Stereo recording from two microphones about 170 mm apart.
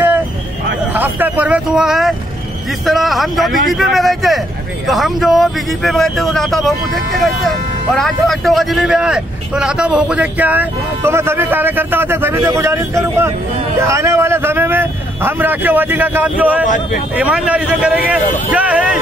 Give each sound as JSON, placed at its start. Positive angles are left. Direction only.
{"t": 0.9, "sound": "vehicle", "side_deg": -10}
{"t": 2.9, "sound": "speech", "side_deg": 0}
{"t": 16.6, "sound": "speech", "side_deg": 50}
{"t": 17.2, "sound": "speech", "side_deg": -5}